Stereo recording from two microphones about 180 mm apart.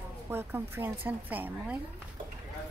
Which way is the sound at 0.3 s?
10° right (ahead or behind).